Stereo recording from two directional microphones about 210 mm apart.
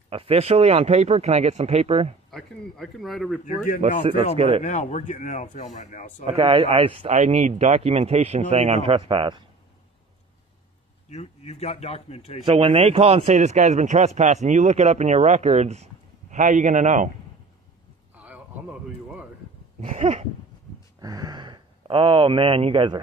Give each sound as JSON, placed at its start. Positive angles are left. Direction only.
{"t": 0.1, "sound": "speech", "side_deg": -25}
{"t": 2.3, "sound": "speech", "side_deg": 0}
{"t": 4.0, "sound": "speech", "side_deg": -25}
{"t": 4.6, "sound": "speech", "side_deg": 35}
{"t": 6.2, "sound": "speech", "side_deg": -25}
{"t": 11.1, "sound": "speech", "side_deg": 30}
{"t": 12.4, "sound": "speech", "side_deg": -25}
{"t": 18.1, "sound": "a sound", "side_deg": -5}
{"t": 19.8, "sound": "speech", "side_deg": -35}
{"t": 21.0, "sound": "speech", "side_deg": -15}